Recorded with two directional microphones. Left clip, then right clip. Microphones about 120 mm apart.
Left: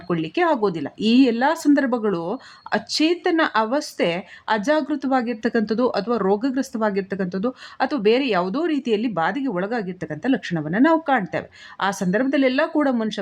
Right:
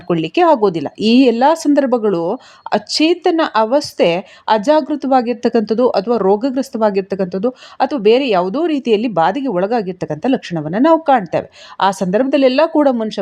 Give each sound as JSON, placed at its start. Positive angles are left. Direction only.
{"t": 0.1, "sound": "speech", "side_deg": -30}